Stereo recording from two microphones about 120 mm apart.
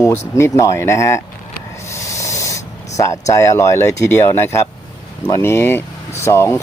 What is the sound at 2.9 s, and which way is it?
Speech, 25° left (ahead or behind).